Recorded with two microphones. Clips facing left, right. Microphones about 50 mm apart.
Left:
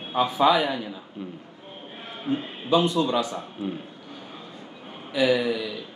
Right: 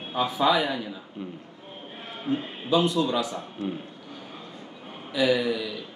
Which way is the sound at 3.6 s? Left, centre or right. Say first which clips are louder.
Even; centre.